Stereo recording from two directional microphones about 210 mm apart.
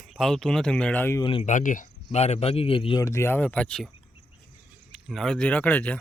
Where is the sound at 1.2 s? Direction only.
25° left (ahead or behind).